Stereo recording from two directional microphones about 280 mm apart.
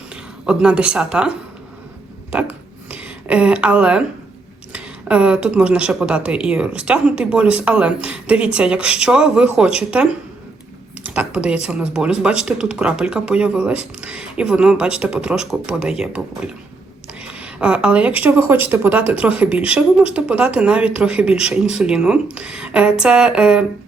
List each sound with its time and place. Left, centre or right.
0.1 s speech: centre
2.9 s speech: centre
17.2 s a sound: centre
18.2 s speech: centre